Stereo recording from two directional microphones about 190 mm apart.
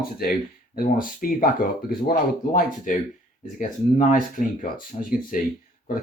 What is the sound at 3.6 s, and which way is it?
Speech, 45° left (ahead or behind).